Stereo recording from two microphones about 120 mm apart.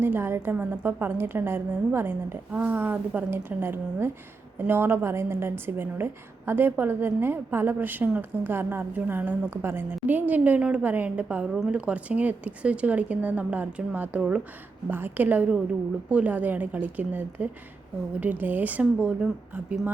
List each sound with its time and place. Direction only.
0.0 s a woman's voice: 20° right (ahead or behind)